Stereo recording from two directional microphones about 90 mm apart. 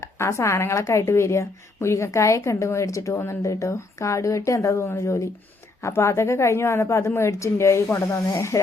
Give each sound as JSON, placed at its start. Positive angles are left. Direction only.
{"t": 0.0, "sound": "a woman's voice", "side_deg": 35}